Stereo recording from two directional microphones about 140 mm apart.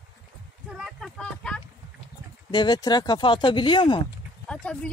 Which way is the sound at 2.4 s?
30° left (ahead or behind).